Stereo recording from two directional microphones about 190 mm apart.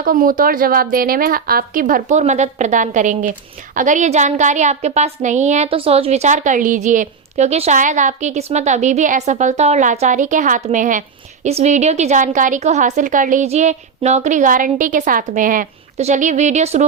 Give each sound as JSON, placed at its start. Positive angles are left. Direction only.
{"t": 0.0, "sound": "a woman's voice", "side_deg": -50}